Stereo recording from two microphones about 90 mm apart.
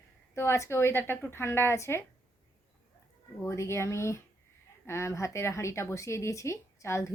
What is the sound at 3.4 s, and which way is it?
A woman's voice, 30° left (ahead or behind).